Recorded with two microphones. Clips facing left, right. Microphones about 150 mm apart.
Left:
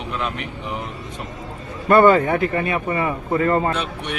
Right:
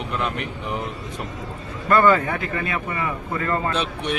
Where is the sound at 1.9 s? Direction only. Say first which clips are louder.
Left 4 dB; 25° left (ahead or behind).